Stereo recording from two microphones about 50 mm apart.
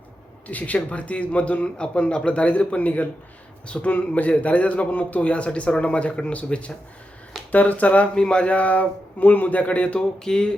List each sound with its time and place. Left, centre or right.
0.4 s a man's voice: left
8.1 s a man's voice: centre
10.0 s a sound: centre